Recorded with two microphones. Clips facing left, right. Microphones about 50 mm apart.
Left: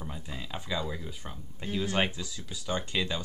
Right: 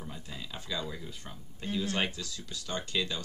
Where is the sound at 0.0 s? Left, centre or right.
Left.